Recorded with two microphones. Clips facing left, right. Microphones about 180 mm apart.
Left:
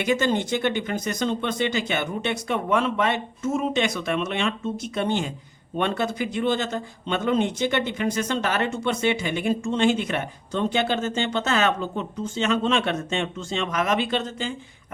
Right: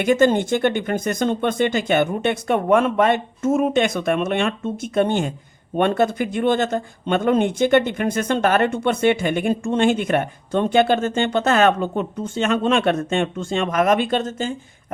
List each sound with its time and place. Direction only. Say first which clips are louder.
0.0 s speech: right 6 dB; 50° right (ahead or behind)